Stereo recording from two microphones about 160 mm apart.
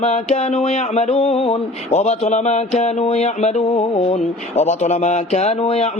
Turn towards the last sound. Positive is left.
turn(degrees=40)  # may be behind; listen again after turning